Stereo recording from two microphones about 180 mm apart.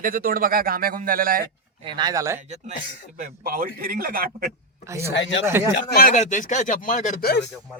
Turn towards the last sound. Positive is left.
turn(degrees=45)  # may be behind; listen again after turning